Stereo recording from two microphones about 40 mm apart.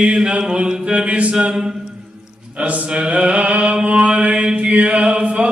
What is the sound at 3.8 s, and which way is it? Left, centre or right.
Mantra, right.